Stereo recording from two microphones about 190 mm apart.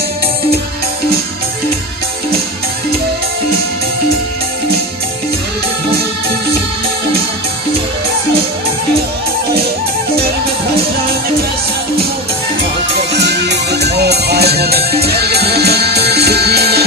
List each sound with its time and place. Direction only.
12.9 s music: 65° right (ahead or behind)